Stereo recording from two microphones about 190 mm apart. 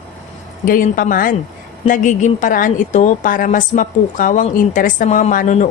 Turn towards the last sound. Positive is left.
turn(degrees=45)  # may be behind; listen again after turning